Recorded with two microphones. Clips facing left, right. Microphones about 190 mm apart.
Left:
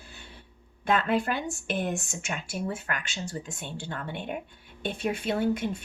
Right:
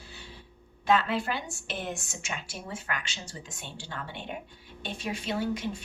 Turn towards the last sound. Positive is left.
turn(degrees=55)  # may be behind; listen again after turning